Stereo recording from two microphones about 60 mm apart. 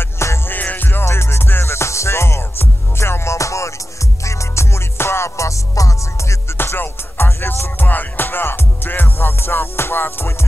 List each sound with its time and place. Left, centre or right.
0.0 s music: left
0.5 s music: left
1.0 s music: left
6.5 s music: left